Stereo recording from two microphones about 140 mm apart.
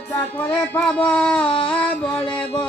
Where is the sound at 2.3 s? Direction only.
10° left (ahead or behind).